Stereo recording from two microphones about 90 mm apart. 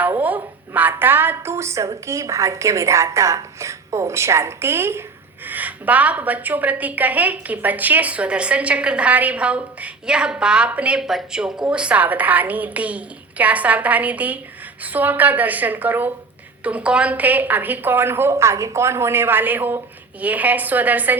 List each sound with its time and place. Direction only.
0.0 s a woman's voice: 20° right (ahead or behind)